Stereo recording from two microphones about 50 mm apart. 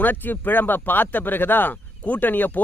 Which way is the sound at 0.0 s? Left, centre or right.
Left.